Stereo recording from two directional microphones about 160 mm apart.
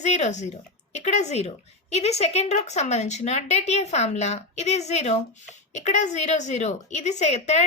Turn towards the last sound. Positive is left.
turn(degrees=45)  # may be behind; listen again after turning